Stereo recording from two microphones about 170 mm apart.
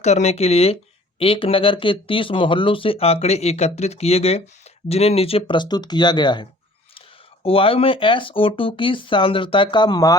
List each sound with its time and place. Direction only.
0.0 s speech: 40° left (ahead or behind); by 10.2 s 25° left (ahead or behind)